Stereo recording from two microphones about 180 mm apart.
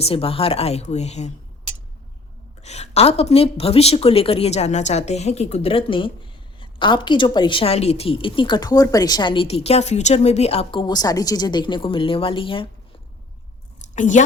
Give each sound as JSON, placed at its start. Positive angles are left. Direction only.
{"t": 0.0, "sound": "a woman's voice", "side_deg": 30}
{"t": 2.6, "sound": "a woman's voice", "side_deg": 35}
{"t": 13.9, "sound": "a woman's voice", "side_deg": 45}